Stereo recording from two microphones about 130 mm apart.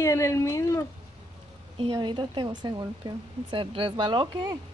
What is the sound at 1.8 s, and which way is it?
Speech, 40° right (ahead or behind).